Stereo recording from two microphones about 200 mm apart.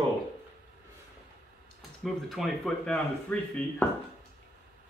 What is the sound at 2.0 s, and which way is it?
Speech, centre (ahead or behind).